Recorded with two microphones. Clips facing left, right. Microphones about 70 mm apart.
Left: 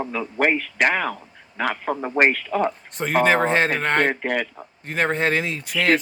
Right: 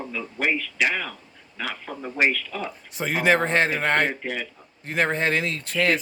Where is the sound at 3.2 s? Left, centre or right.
Centre.